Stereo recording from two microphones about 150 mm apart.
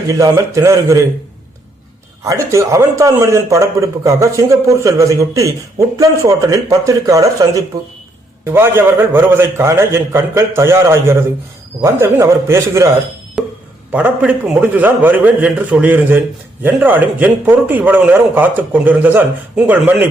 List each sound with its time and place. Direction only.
0.1 s a man's voice: 20° right (ahead or behind)
2.2 s a man's voice: 20° right (ahead or behind)
13.9 s a man's voice: 10° right (ahead or behind)